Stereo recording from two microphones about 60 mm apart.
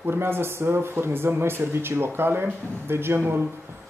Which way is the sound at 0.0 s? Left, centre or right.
Right.